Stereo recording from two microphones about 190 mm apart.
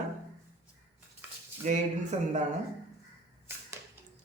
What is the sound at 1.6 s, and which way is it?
Speech, 35° right (ahead or behind).